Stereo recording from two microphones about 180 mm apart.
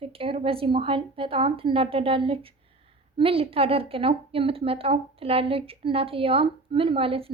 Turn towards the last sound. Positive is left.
turn(degrees=-30)  # may be behind; listen again after turning